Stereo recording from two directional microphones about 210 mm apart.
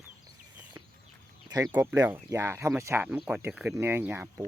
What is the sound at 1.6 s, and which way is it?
Speech, 10° right (ahead or behind).